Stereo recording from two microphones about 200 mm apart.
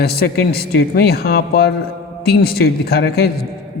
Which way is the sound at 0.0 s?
50° left (ahead or behind).